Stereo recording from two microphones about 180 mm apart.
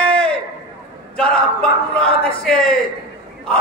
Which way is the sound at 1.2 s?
5° left (ahead or behind).